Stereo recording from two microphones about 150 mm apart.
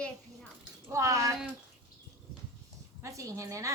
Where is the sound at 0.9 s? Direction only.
20° right (ahead or behind).